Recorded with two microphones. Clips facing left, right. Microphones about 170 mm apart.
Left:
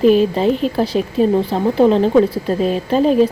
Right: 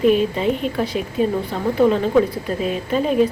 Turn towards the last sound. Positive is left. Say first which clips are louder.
# left 4 dB
turn(degrees=35)  # may be behind; listen again after turning